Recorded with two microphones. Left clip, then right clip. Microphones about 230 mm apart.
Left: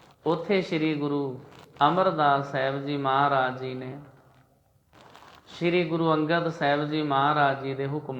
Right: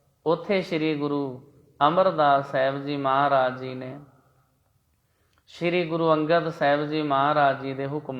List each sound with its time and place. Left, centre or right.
0.2 s speech: right
5.5 s speech: right